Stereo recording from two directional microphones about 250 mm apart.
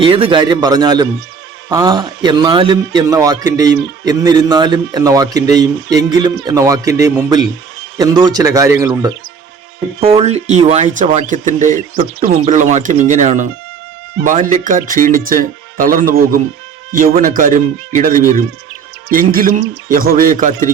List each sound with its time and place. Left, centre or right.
0.0 s speech: right